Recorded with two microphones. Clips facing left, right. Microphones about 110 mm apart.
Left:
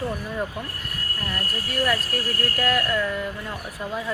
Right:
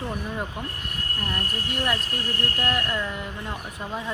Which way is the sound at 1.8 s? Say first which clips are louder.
Left 5 dB; 20° right (ahead or behind).